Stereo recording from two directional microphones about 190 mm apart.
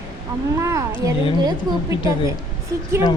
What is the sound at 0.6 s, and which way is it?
A woman's voice, 15° right (ahead or behind).